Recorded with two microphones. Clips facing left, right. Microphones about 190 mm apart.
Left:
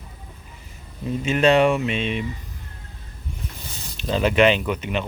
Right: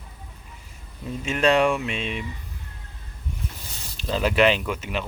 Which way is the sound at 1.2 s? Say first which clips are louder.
Left 3 dB; centre (ahead or behind).